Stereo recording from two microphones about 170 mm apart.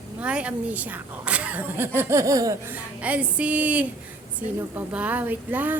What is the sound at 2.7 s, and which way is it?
A woman's voice, 10° right (ahead or behind).